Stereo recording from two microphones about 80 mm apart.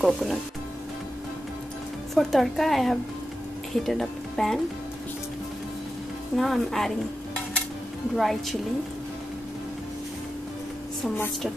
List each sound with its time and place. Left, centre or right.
0.0 s speech: centre
2.1 s speech: centre
6.3 s speech: centre
8.2 s speech: centre